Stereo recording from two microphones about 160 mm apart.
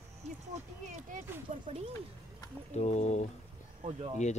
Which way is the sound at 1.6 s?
35° right (ahead or behind).